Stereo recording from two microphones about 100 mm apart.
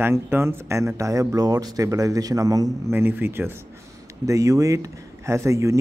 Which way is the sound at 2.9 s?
25° right (ahead or behind).